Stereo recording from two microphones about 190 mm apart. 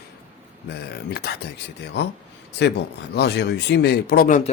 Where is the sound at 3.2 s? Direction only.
60° left (ahead or behind).